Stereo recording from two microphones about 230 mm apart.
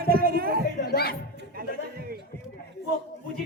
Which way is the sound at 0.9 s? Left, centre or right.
Left.